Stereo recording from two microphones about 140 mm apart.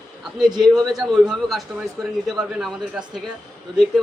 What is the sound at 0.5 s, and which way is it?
A man's voice, centre (ahead or behind).